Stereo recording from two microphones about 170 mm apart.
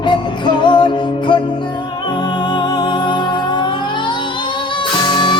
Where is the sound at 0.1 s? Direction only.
30° left (ahead or behind).